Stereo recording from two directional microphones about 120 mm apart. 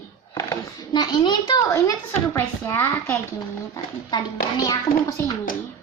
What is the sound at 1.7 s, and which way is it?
A woman's voice, 25° left (ahead or behind).